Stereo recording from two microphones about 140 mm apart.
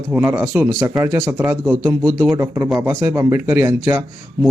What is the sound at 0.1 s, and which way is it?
Speech, 15° right (ahead or behind).